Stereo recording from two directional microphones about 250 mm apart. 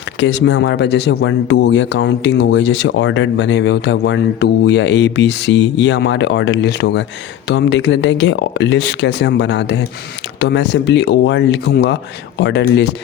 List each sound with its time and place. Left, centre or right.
0.2 s speech: left